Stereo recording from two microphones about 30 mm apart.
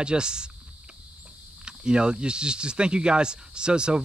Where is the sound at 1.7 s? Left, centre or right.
Right.